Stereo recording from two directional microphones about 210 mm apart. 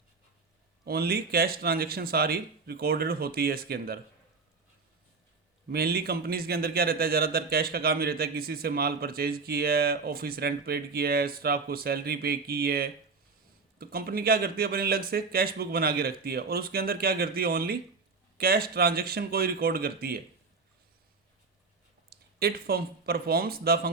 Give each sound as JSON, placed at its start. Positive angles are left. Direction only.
{"t": 0.9, "sound": "speech", "side_deg": -45}
{"t": 5.7, "sound": "speech", "side_deg": -45}
{"t": 22.1, "sound": "speech", "side_deg": -45}